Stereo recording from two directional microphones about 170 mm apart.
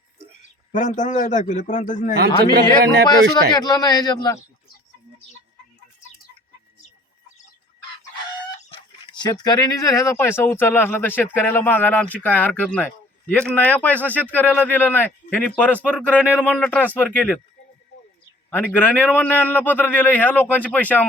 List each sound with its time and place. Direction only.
0.7 s a man's voice: 45° left (ahead or behind)
2.5 s speech: 65° right (ahead or behind)
3.5 s a man's voice: 25° left (ahead or behind)
8.7 s speech: 25° left (ahead or behind); by 17.4 s 10° left (ahead or behind)
18.5 s speech: 10° left (ahead or behind)